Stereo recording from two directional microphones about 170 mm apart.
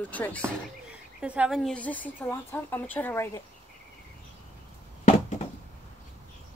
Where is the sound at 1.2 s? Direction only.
5° right (ahead or behind); by 3.4 s 15° left (ahead or behind).